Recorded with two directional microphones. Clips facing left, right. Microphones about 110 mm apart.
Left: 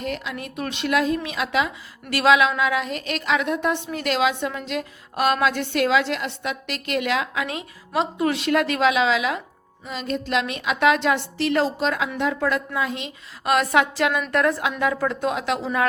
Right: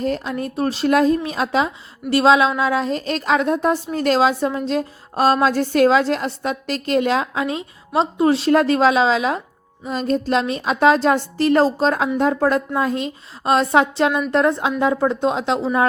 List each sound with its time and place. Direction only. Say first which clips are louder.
0.0 s speech: right 7 dB; 35° right (ahead or behind)